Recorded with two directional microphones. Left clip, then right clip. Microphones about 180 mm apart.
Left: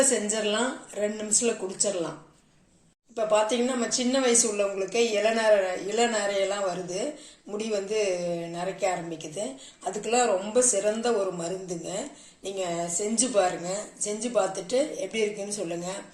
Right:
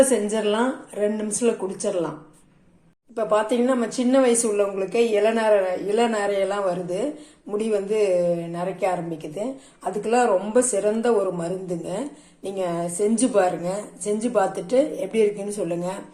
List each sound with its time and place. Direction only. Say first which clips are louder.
0.1 s speech: right 5 dB; 5° right (ahead or behind)
3.2 s a woman's voice: right 3 dB; centre (ahead or behind)